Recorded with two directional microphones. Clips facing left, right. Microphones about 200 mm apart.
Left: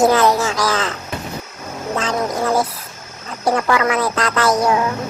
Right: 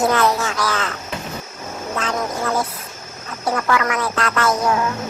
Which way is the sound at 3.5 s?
25° left (ahead or behind).